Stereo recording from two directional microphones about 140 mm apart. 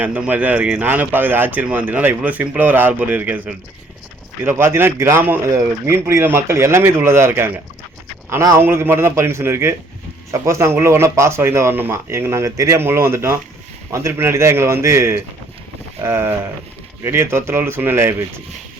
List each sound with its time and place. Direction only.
0.0 s speech: 10° right (ahead or behind)